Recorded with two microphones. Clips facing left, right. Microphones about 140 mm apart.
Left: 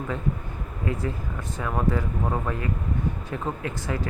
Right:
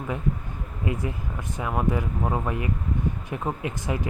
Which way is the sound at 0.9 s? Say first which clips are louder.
Even; 15° right (ahead or behind).